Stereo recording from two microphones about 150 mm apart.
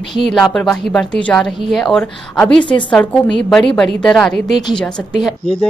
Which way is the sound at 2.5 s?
35° left (ahead or behind).